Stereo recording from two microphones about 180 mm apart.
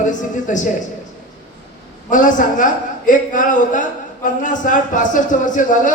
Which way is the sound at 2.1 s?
45° left (ahead or behind).